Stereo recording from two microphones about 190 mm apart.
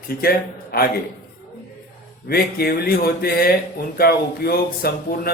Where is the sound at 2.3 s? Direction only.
55° left (ahead or behind).